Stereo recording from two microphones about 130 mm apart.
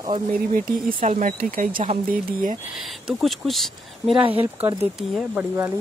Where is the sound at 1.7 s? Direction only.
40° right (ahead or behind).